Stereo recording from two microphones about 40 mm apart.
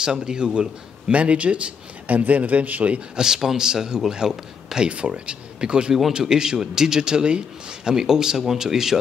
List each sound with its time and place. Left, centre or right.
0.0 s a man's voice: centre; by 3.0 s right
3.2 s a man's voice: centre